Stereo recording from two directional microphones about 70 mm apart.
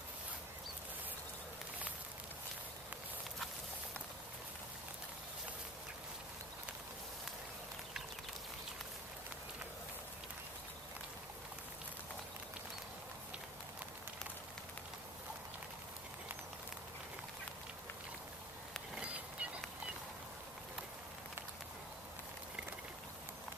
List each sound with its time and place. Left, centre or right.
18.9 s fowl: centre